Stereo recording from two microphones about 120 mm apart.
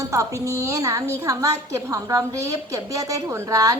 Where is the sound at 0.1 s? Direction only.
25° right (ahead or behind).